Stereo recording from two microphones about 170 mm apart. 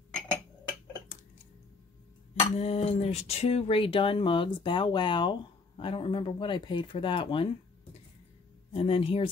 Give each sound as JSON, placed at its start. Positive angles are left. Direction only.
{"t": 2.5, "sound": "speech", "side_deg": 40}
{"t": 8.7, "sound": "speech", "side_deg": 35}